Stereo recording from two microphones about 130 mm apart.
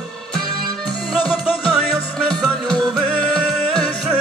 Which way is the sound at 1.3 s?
5° right (ahead or behind).